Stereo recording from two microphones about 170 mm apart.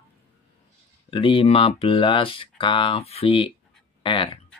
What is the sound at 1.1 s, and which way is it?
Speech, 30° left (ahead or behind).